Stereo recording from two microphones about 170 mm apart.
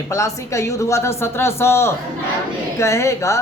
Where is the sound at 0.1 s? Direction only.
20° left (ahead or behind).